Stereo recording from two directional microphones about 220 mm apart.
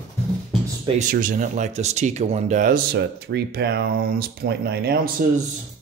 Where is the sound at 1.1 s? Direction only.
35° right (ahead or behind).